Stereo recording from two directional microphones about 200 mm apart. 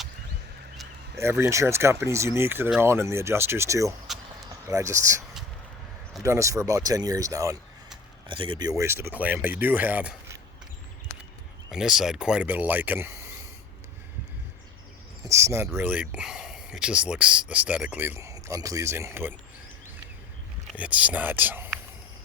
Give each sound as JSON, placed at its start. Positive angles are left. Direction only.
{"t": 1.2, "sound": "speech", "side_deg": -15}
{"t": 6.2, "sound": "speech", "side_deg": -15}
{"t": 11.7, "sound": "speech", "side_deg": 0}
{"t": 15.3, "sound": "speech", "side_deg": -15}
{"t": 20.7, "sound": "speech", "side_deg": -5}